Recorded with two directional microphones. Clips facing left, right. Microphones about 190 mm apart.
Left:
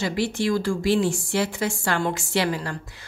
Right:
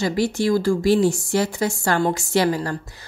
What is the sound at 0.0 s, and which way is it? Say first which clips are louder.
A woman's voice: right 4 dB; 40° right (ahead or behind).